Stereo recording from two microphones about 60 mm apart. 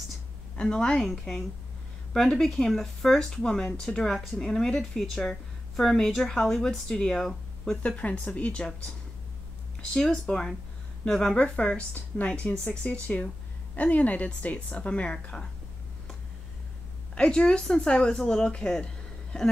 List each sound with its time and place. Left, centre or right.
0.6 s speech: centre
1.0 s a woman's voice: centre
7.8 s a woman's voice: left
9.8 s a woman's voice: centre
17.1 s speech: centre